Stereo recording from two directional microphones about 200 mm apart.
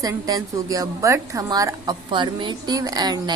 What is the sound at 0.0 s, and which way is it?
A woman's voice, 20° right (ahead or behind).